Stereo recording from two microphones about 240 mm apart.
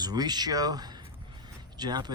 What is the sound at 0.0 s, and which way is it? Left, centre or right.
Speech, centre.